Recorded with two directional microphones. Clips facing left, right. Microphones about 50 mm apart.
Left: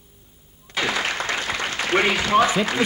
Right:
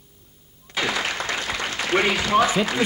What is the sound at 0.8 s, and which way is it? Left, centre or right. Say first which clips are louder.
Applause: left 1 dB; left.